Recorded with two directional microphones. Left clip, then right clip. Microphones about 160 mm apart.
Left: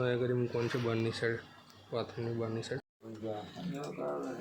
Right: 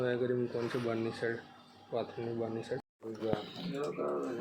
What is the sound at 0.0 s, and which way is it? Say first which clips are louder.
Speech: even; 30° left (ahead or behind).